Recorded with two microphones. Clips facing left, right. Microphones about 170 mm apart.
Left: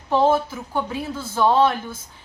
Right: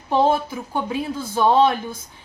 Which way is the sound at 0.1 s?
15° right (ahead or behind).